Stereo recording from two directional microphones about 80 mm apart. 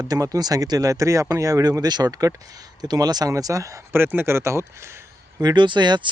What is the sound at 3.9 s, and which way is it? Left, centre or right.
Speech, right.